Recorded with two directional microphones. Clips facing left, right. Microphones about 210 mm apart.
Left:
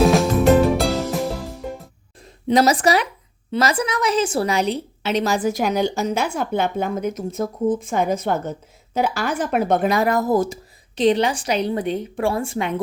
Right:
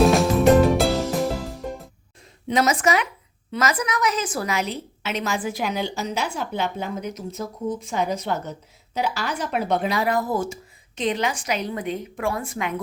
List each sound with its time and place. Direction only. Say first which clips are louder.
0.0 s music: left 1 dB; centre (ahead or behind)
2.5 s a woman's voice: left 4 dB; 35° left (ahead or behind)